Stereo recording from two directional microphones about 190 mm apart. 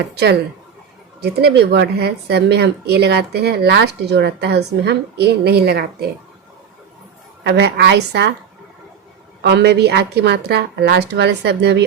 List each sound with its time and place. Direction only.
1.2 s speech: 60° right (ahead or behind)
7.4 s speech: 60° right (ahead or behind)
9.4 s speech: 65° right (ahead or behind)